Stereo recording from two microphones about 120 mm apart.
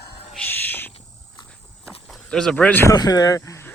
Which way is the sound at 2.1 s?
5° left (ahead or behind).